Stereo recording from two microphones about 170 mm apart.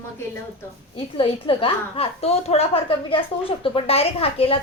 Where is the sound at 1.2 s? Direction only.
30° left (ahead or behind).